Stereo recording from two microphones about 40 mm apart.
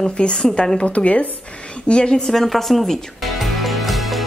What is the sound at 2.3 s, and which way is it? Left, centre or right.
Speech, centre.